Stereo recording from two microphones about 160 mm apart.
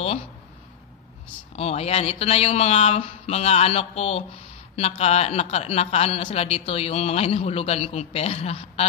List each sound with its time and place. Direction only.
1.6 s speech: 40° left (ahead or behind)